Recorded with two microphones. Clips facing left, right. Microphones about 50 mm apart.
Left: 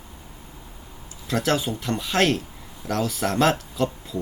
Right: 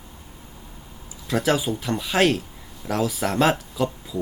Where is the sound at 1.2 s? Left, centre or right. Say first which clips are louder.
Right 1 dB; centre.